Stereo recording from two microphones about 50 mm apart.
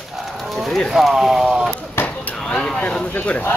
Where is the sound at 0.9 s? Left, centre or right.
Centre.